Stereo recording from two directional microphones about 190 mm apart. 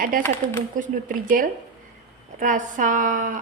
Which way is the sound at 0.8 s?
45° right (ahead or behind).